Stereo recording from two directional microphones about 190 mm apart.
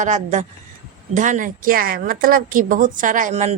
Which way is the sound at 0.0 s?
40° right (ahead or behind).